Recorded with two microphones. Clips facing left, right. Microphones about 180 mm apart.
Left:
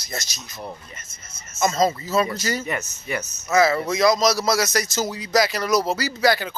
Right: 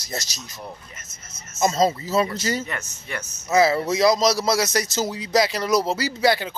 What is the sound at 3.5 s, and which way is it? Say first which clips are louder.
A man's voice: even; 30° right (ahead or behind).